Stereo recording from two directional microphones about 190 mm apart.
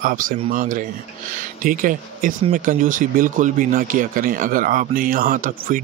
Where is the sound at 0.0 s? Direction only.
45° right (ahead or behind).